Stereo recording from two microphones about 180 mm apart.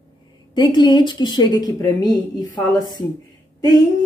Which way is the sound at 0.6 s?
25° left (ahead or behind).